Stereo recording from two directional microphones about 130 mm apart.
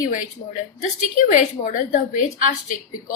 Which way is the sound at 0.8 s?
75° left (ahead or behind).